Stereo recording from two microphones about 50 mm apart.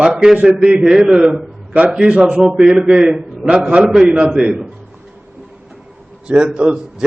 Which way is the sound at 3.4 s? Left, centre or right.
Right.